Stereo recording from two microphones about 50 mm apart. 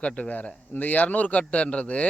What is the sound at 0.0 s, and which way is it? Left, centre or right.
A man's voice, left.